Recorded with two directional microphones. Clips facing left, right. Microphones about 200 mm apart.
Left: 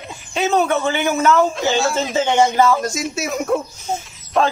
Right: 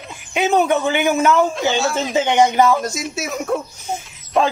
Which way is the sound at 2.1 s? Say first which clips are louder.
Right 1 dB; 15° right (ahead or behind).